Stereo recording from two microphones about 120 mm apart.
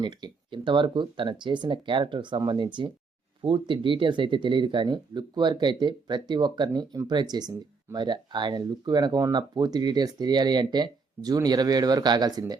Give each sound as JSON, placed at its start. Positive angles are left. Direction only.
{"t": 0.0, "sound": "speech", "side_deg": -40}